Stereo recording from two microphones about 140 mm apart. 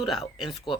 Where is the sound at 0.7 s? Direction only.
35° left (ahead or behind).